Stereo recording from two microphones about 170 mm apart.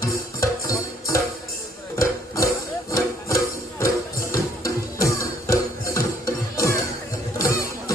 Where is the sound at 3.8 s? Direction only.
15° left (ahead or behind).